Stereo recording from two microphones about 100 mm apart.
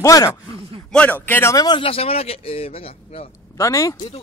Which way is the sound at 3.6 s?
35° left (ahead or behind).